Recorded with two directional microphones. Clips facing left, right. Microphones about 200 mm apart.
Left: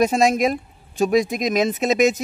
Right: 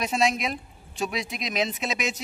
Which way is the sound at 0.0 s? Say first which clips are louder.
Left 8 dB; 45° left (ahead or behind).